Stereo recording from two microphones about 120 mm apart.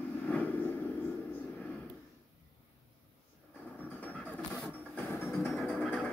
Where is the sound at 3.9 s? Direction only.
15° left (ahead or behind).